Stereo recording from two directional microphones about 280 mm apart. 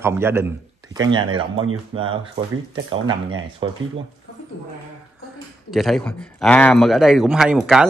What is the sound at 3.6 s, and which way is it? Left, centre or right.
Speech, centre.